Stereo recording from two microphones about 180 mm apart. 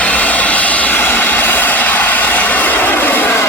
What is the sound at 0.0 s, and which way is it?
Vehicle, 10° left (ahead or behind).